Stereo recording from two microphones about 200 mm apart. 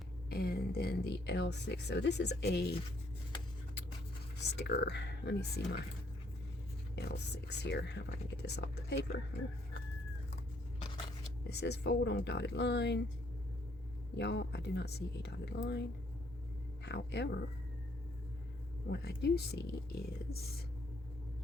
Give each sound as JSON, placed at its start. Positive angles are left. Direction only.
{"t": 0.3, "sound": "speech", "side_deg": 50}
{"t": 4.4, "sound": "speech", "side_deg": 60}
{"t": 6.9, "sound": "speech", "side_deg": 55}
{"t": 11.4, "sound": "speech", "side_deg": 55}
{"t": 14.2, "sound": "speech", "side_deg": 60}
{"t": 18.9, "sound": "speech", "side_deg": 55}